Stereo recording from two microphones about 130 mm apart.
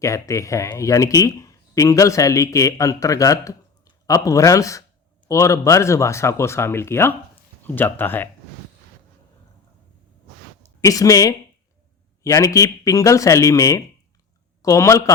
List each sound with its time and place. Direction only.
0.0 s speech: 25° left (ahead or behind)
10.8 s speech: 25° left (ahead or behind)